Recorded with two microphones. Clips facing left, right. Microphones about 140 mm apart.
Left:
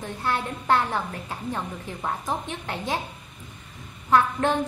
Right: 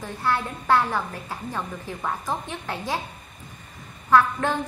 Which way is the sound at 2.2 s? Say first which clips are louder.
Even; 20° left (ahead or behind).